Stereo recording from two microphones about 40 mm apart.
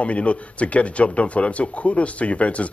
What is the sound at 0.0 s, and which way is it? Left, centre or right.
A man's voice, left.